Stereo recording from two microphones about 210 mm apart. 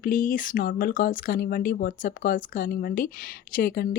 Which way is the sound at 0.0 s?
40° left (ahead or behind).